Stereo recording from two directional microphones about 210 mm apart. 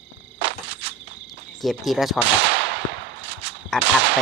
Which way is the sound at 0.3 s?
55° right (ahead or behind).